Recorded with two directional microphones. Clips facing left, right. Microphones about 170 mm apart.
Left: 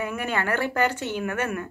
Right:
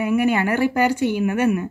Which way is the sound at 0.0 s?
10° right (ahead or behind).